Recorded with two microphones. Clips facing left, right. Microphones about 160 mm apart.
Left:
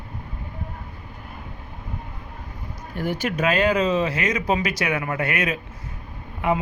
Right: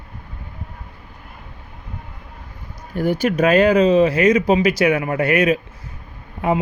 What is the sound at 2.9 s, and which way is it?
Speech, 40° right (ahead or behind).